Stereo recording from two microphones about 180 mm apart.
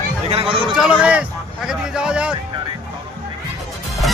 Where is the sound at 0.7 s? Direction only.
5° right (ahead or behind).